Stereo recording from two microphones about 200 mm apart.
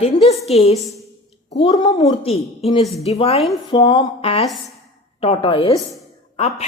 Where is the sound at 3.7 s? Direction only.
20° left (ahead or behind).